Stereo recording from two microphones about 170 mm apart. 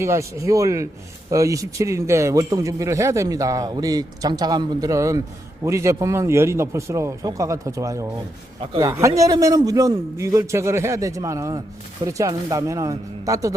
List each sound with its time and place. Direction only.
0.0 s a man's voice: 15° right (ahead or behind)